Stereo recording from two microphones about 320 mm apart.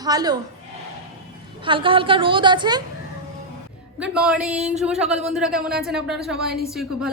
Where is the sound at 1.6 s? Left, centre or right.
Centre.